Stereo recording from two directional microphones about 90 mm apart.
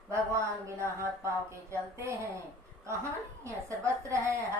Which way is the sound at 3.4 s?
35° right (ahead or behind).